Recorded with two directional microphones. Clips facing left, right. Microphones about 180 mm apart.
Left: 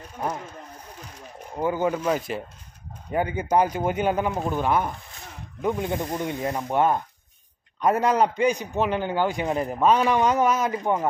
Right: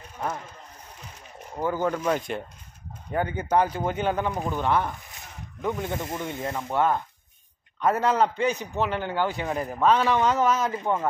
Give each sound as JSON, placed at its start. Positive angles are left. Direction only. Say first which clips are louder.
{"t": 1.6, "sound": "a man's voice", "louder": "left 2 dB", "side_deg": 15}